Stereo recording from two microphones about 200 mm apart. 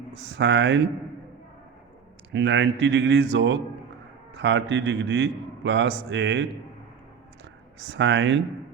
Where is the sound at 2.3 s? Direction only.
65° right (ahead or behind).